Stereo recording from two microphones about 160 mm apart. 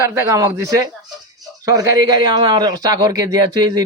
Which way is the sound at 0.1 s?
20° right (ahead or behind).